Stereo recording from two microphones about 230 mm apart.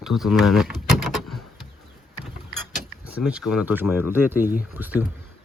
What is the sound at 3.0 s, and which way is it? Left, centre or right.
Speech, centre.